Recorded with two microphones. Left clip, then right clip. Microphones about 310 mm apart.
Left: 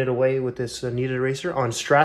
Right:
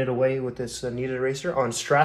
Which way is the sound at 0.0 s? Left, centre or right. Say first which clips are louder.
Left 2 dB; left.